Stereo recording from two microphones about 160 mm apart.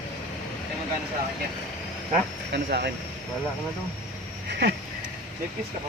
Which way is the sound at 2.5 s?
85° right.